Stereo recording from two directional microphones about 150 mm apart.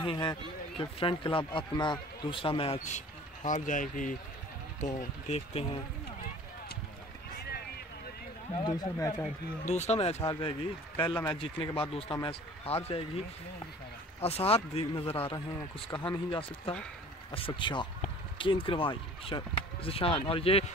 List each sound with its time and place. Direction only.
0.0 s speech: 30° left (ahead or behind)
3.4 s speech: 60° left (ahead or behind)
5.5 s speech: 40° left (ahead or behind)
7.3 s vehicle: 90° left
8.6 s speech: 25° left (ahead or behind)
9.7 s speech: 45° left (ahead or behind)
11.2 s speech: 35° left (ahead or behind)
14.2 s speech: 40° left (ahead or behind)